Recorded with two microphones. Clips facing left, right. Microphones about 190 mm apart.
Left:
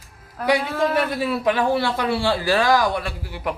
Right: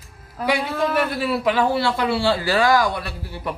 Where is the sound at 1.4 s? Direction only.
15° left (ahead or behind).